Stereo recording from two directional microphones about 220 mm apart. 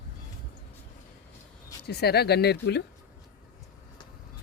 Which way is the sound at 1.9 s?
45° left (ahead or behind).